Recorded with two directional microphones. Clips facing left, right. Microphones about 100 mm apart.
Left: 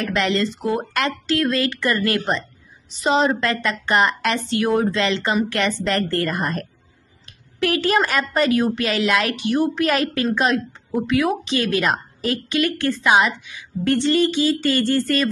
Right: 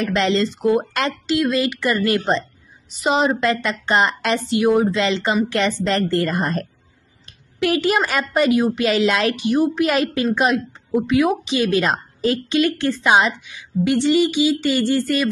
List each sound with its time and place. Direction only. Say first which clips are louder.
0.0 s a woman's voice: right 2 dB; 25° right (ahead or behind)
13.8 s speech: right 1 dB; 15° right (ahead or behind)